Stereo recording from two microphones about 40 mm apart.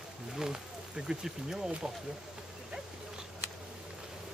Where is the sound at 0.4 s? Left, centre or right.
Centre.